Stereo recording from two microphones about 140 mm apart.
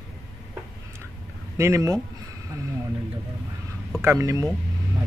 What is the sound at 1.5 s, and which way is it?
Speech, 20° right (ahead or behind).